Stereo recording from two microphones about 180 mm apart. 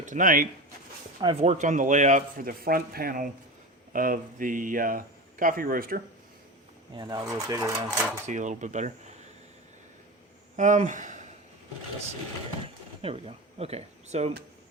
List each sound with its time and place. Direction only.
0.0 s speech: 45° right (ahead or behind)
1.2 s speech: 25° right (ahead or behind)
1.5 s speech: 40° right (ahead or behind)
6.9 s speech: 20° right (ahead or behind)
8.3 s speech: 45° right (ahead or behind)
10.6 s speech: 45° right (ahead or behind)
13.0 s speech: 35° right (ahead or behind)